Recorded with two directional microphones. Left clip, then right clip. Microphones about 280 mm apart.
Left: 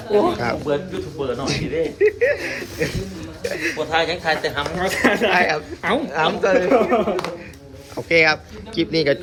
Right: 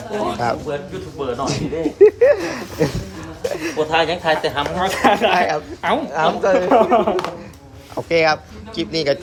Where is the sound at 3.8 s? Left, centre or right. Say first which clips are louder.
Right 4 dB; right.